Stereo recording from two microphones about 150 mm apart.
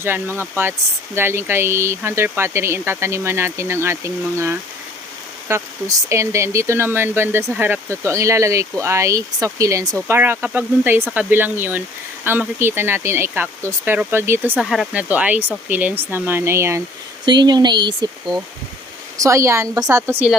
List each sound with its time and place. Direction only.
0.0 s speech: 15° right (ahead or behind)
17.2 s speech: 30° right (ahead or behind)
19.1 s speech: 20° right (ahead or behind)